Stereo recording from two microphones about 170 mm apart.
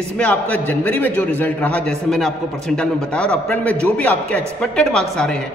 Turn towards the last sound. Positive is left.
turn(degrees=5)  # may be behind; listen again after turning